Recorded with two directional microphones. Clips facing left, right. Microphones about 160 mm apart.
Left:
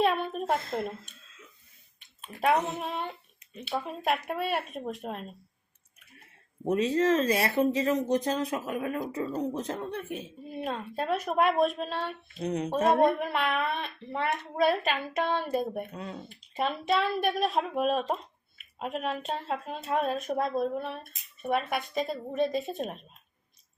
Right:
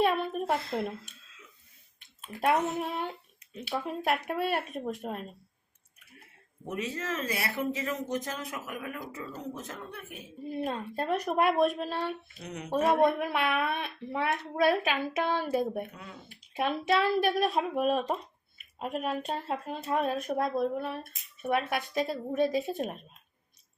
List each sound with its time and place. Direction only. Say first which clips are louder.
0.0 s a sound: even; 5° right (ahead or behind)
0.4 s speech: left 1 dB; centre (ahead or behind)
2.4 s speech: left 1 dB; 5° right (ahead or behind)
6.9 s speech: left 10 dB; 35° left (ahead or behind)
10.5 s speech: right 1 dB; centre (ahead or behind)
12.4 s speech: left 10 dB; 30° left (ahead or behind)
13.1 s a woman's voice: even; 5° right (ahead or behind)